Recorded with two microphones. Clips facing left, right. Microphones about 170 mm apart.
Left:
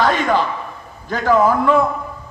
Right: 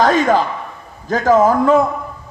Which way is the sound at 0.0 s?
40° right (ahead or behind).